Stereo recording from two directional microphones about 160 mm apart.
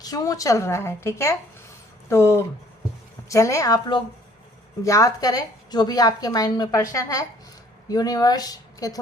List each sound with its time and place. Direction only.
0.0 s a woman's voice: 25° left (ahead or behind)